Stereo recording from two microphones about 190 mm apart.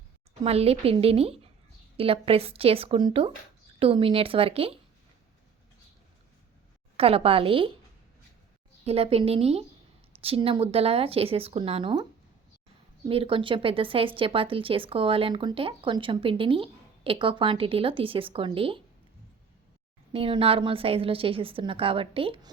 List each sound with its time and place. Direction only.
0.4 s a woman's voice: 30° right (ahead or behind)
6.9 s a woman's voice: 30° right (ahead or behind)
8.8 s a woman's voice: 30° right (ahead or behind)
13.1 s speech: 30° right (ahead or behind)
20.1 s speech: 30° right (ahead or behind)